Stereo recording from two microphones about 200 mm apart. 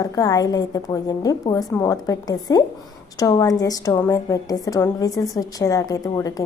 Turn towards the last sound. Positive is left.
turn(degrees=15)  # may be behind; listen again after turning